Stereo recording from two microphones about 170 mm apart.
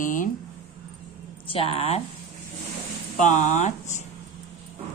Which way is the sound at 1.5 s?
35° left (ahead or behind).